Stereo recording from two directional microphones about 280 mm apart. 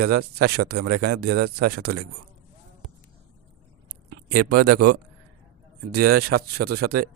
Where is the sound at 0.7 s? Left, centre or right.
Right.